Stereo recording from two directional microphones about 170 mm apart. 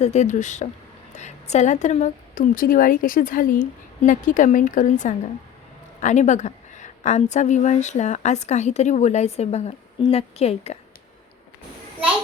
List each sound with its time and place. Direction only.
0.0 s a woman's voice: 45° left (ahead or behind)